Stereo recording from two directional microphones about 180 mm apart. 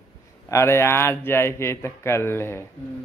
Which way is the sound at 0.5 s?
15° left (ahead or behind).